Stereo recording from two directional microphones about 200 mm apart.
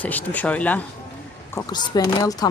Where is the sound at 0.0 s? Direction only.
10° left (ahead or behind).